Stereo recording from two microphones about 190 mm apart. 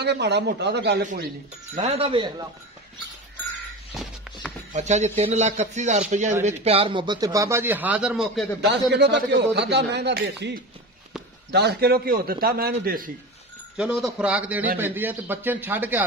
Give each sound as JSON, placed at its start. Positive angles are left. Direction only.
{"t": 0.0, "sound": "a man's voice", "side_deg": -65}
{"t": 1.8, "sound": "speech", "side_deg": -30}
{"t": 3.9, "sound": "a sound", "side_deg": 0}
{"t": 4.7, "sound": "a man's voice", "side_deg": -40}
{"t": 8.5, "sound": "a man's voice", "side_deg": -60}
{"t": 13.7, "sound": "speech", "side_deg": 0}